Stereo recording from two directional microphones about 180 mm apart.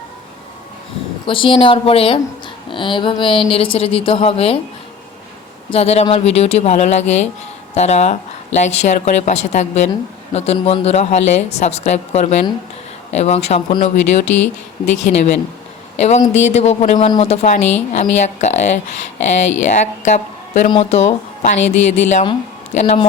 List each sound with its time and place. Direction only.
1.3 s a woman's voice: 30° left (ahead or behind)
5.7 s speech: 35° left (ahead or behind)